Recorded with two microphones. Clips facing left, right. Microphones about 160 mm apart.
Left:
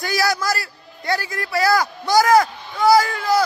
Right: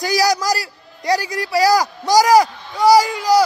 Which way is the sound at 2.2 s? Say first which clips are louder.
Right 2 dB; 15° right (ahead or behind).